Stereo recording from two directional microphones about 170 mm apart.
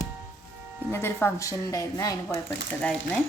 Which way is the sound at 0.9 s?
15° left (ahead or behind).